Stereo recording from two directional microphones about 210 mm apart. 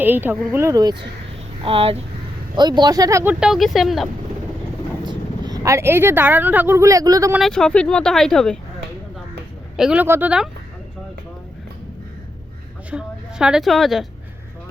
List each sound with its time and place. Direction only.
0.0 s speech: 10° right (ahead or behind)
3.4 s speech: centre (ahead or behind)
5.0 s speech: 15° right (ahead or behind)
7.3 s speech: centre (ahead or behind)
9.7 s speech: 5° right (ahead or behind)
12.9 s a woman's voice: 5° right (ahead or behind)